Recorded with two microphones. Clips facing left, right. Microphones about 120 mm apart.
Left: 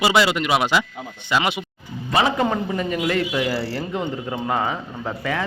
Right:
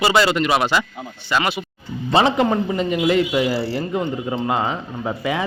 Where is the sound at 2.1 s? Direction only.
25° right (ahead or behind).